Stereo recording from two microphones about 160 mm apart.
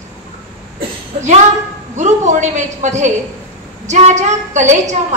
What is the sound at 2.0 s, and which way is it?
A woman's voice, 50° right (ahead or behind).